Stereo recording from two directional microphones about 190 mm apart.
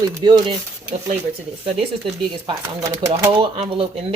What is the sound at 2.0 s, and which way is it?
Speech, 20° right (ahead or behind).